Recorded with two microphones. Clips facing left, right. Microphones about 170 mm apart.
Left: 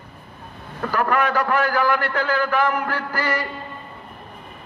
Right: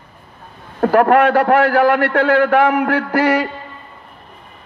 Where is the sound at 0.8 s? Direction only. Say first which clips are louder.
Right 10 dB; 65° right (ahead or behind).